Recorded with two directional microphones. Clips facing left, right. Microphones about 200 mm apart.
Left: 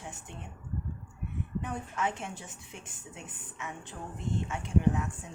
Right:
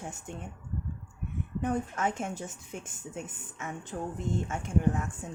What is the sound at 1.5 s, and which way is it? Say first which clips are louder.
Speech: right 5 dB; 45° right (ahead or behind).